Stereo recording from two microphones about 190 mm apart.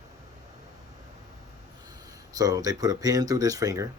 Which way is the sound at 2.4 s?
20° right (ahead or behind).